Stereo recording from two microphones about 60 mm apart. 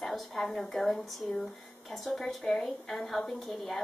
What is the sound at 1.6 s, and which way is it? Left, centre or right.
A woman's voice, centre.